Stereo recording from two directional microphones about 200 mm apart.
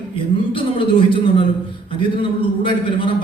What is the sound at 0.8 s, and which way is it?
Speech, 25° left (ahead or behind).